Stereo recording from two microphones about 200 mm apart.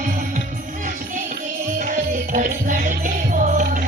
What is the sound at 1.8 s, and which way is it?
Music, 40° right (ahead or behind).